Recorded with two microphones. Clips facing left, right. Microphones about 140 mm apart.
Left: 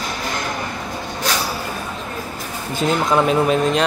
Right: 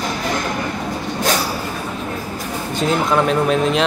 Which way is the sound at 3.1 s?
Centre (ahead or behind).